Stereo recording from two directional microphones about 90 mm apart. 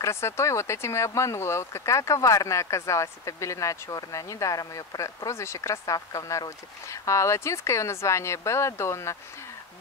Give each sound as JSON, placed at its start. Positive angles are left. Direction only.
{"t": 0.0, "sound": "speech", "side_deg": 30}